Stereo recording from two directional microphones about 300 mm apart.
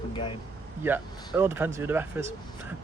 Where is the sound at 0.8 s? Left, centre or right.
Centre.